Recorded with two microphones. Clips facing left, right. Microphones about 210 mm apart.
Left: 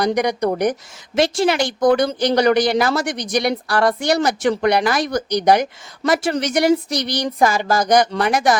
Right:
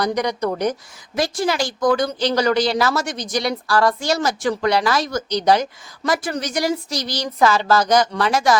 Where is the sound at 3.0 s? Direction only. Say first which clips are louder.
Left 3 dB; 60° left (ahead or behind).